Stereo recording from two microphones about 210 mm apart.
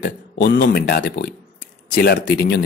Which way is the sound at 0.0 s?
50° left (ahead or behind).